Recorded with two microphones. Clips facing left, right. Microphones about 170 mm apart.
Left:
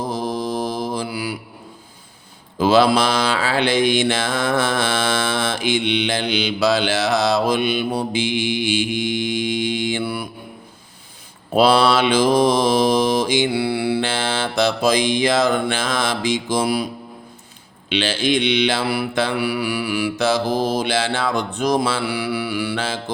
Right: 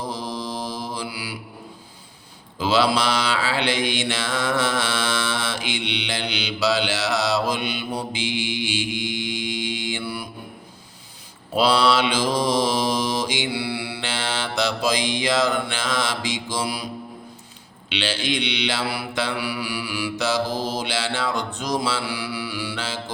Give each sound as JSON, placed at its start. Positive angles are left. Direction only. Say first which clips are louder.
{"t": 0.1, "sound": "mantra", "louder": "left 6 dB", "side_deg": 50}
{"t": 2.6, "sound": "mantra", "louder": "left 5 dB", "side_deg": 50}
{"t": 11.5, "sound": "mantra", "louder": "left 4 dB", "side_deg": 50}
{"t": 17.8, "sound": "mantra", "louder": "left 6 dB", "side_deg": 50}